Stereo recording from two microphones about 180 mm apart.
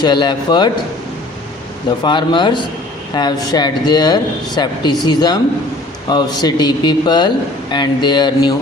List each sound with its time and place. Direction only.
0.0 s a man's voice: 25° left (ahead or behind)
2.0 s a man's voice: 25° left (ahead or behind)